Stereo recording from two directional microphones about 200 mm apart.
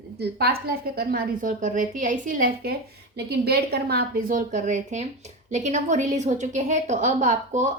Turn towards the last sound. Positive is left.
turn(degrees=-35)  # may be behind; listen again after turning